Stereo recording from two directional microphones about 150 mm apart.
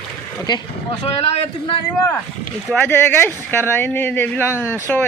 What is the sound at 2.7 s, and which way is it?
Speech, 10° left (ahead or behind).